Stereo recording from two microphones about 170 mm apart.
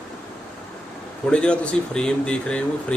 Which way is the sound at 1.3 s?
5° left (ahead or behind).